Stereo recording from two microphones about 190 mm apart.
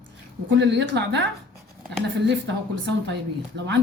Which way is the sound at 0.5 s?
70° right (ahead or behind).